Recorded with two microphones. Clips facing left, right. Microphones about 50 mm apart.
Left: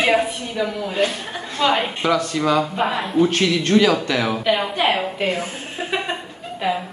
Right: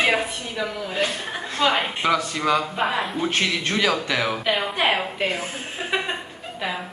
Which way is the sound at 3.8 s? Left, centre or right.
Centre.